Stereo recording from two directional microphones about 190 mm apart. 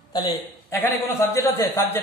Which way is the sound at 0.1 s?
20° left (ahead or behind).